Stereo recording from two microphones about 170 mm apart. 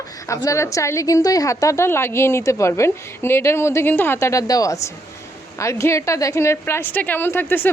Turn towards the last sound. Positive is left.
turn(degrees=10)  # may be behind; listen again after turning